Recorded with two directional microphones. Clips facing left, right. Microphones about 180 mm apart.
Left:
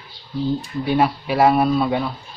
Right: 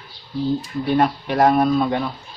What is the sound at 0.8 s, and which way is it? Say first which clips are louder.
Speech: even; 5° left (ahead or behind).